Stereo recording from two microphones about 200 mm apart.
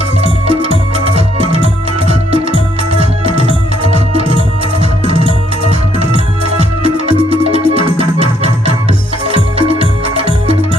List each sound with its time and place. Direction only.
0.2 s music: 30° right (ahead or behind)